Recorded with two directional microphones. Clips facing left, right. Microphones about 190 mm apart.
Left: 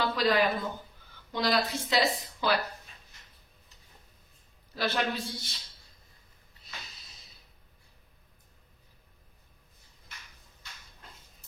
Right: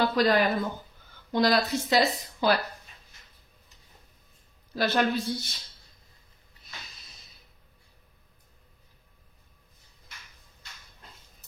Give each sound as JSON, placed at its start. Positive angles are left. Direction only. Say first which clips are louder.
{"t": 0.0, "sound": "a woman's voice", "louder": "right 3 dB", "side_deg": -45}
{"t": 4.7, "sound": "a woman's voice", "louder": "right 5 dB", "side_deg": -45}